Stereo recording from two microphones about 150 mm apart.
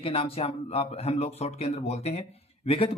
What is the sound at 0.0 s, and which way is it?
Speech, 40° left (ahead or behind).